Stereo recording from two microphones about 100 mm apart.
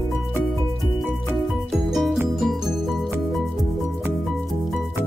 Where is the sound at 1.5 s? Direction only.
Centre (ahead or behind).